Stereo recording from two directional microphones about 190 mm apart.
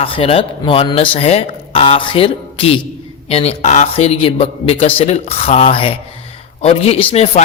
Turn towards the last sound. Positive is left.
turn(degrees=30)  # may be behind; listen again after turning